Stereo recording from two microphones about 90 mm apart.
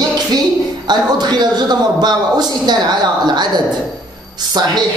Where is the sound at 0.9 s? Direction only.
50° right (ahead or behind).